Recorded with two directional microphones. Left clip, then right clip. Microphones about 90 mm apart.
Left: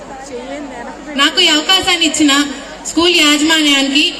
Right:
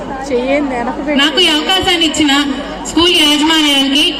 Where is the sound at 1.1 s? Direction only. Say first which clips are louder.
Even; 45° left (ahead or behind).